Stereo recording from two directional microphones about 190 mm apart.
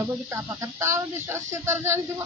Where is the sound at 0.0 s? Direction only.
10° right (ahead or behind).